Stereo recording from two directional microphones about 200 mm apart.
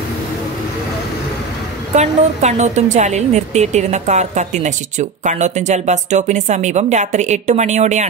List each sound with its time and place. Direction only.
2.0 s a woman's voice: 35° right (ahead or behind)